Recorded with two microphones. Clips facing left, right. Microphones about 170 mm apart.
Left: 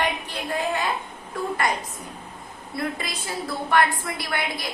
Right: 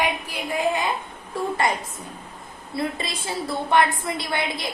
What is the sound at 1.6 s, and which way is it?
A woman's voice, 25° right (ahead or behind).